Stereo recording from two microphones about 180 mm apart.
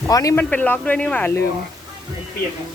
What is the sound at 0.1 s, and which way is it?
Speech, 20° left (ahead or behind).